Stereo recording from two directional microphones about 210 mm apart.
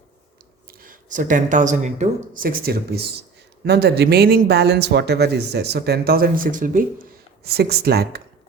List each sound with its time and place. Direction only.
0.7 s speech: 40° right (ahead or behind)